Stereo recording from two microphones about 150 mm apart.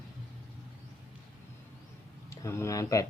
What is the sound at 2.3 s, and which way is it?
Speech, 20° left (ahead or behind).